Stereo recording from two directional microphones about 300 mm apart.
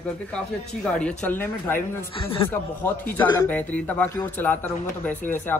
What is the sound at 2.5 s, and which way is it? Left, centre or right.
Speech, centre.